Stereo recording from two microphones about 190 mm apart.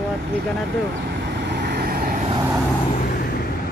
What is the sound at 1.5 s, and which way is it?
Vehicle, 60° right (ahead or behind).